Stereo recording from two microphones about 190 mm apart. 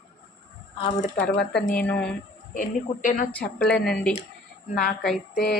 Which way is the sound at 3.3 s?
5° left (ahead or behind).